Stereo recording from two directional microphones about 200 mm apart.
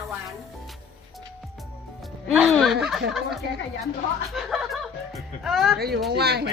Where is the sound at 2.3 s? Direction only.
Centre (ahead or behind).